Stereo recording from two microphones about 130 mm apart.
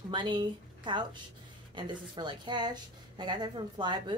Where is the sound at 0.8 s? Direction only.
35° right (ahead or behind).